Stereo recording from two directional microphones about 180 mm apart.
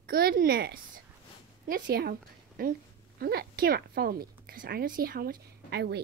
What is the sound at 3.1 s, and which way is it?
A woman's voice, 60° right (ahead or behind).